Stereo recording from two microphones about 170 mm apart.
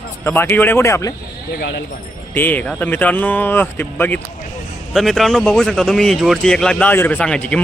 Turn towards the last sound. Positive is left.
turn(degrees=5)  # may be behind; listen again after turning